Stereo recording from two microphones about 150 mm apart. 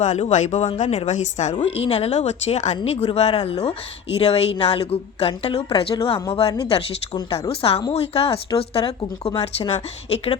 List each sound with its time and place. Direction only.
0.0 s speech: 50° left (ahead or behind)
1.5 s a woman's voice: 40° left (ahead or behind)